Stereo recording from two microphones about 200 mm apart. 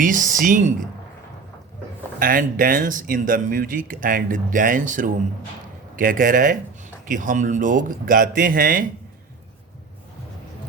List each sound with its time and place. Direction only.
0.0 s speech: 40° right (ahead or behind)
2.1 s speech: 45° right (ahead or behind)